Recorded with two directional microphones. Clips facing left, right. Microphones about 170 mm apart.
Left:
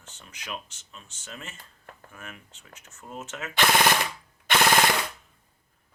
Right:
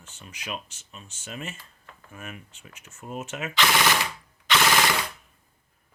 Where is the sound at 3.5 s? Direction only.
50° left (ahead or behind).